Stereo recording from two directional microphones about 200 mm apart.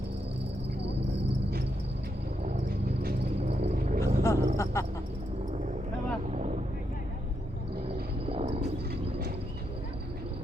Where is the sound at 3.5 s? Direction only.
30° right (ahead or behind).